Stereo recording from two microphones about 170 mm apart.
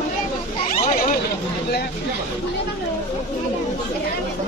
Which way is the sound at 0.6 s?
45° left (ahead or behind).